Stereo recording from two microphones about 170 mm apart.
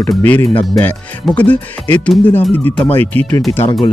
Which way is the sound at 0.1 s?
10° left (ahead or behind).